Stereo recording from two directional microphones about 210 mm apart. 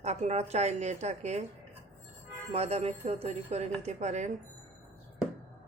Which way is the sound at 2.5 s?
30° right (ahead or behind).